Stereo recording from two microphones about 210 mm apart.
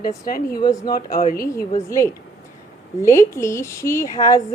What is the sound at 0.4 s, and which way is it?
A woman's voice, 20° left (ahead or behind).